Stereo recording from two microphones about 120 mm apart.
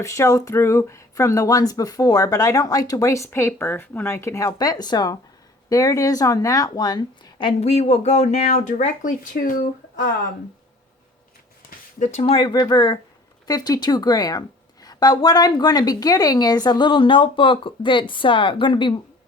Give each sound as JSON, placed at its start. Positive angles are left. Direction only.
{"t": 0.0, "sound": "a woman's voice", "side_deg": 25}
{"t": 7.6, "sound": "speech", "side_deg": 60}
{"t": 9.3, "sound": "speech", "side_deg": 90}
{"t": 11.9, "sound": "speech", "side_deg": 90}
{"t": 12.2, "sound": "a woman's voice", "side_deg": 45}